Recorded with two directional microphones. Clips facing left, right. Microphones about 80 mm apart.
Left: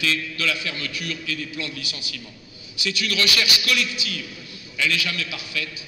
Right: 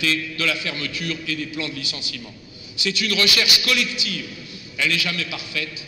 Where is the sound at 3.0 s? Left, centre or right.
Right.